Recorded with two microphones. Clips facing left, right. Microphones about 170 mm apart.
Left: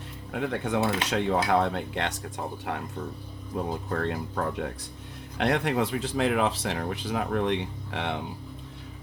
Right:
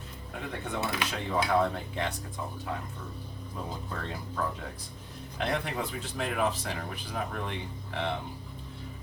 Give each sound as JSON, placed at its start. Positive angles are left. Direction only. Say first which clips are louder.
{"t": 0.3, "sound": "speech", "louder": "left 8 dB", "side_deg": 85}
{"t": 3.8, "sound": "speech", "louder": "left 8 dB", "side_deg": 60}